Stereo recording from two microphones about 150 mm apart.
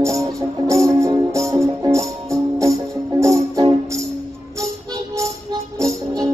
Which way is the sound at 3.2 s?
20° right (ahead or behind).